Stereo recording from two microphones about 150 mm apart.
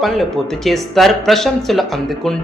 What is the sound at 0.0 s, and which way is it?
Speech, centre (ahead or behind).